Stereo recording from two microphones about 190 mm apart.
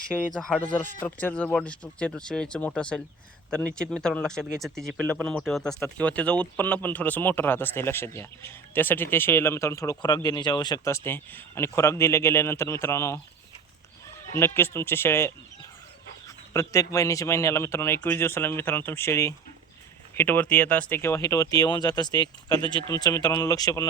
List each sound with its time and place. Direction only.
0.3 s speech: 5° left (ahead or behind)